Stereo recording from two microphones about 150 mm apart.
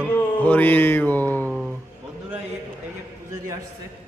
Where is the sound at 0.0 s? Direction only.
10° left (ahead or behind).